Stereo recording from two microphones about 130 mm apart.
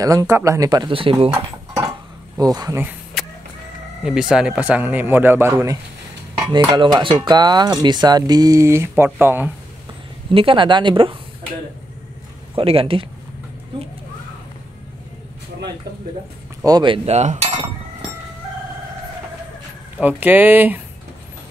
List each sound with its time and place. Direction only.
0.0 s speech: 25° right (ahead or behind); by 1.3 s 45° right (ahead or behind)
2.3 s speech: 30° right (ahead or behind)
4.0 s speech: 5° right (ahead or behind)
6.5 s cutlery: 35° right (ahead or behind); by 9.5 s 15° right (ahead or behind)
10.3 s cutlery: 45° right (ahead or behind)
12.5 s cutlery: 45° right (ahead or behind)
16.6 s cutlery: 35° right (ahead or behind); by 17.5 s 60° right (ahead or behind)
20.0 s speech: 10° right (ahead or behind)